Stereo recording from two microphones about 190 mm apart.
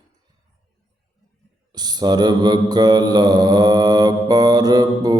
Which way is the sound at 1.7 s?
20° right (ahead or behind).